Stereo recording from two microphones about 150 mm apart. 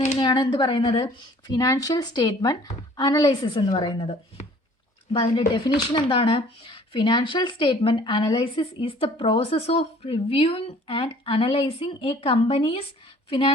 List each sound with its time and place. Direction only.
0.2 s speech: 30° left (ahead or behind)
1.0 s speech: 25° left (ahead or behind)